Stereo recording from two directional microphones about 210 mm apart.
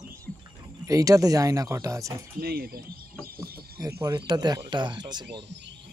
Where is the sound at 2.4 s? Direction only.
45° right (ahead or behind).